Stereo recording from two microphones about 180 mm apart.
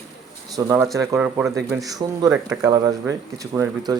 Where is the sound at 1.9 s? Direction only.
20° right (ahead or behind).